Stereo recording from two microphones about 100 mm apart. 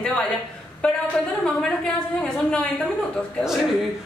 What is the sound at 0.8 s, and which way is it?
Speech, 10° left (ahead or behind).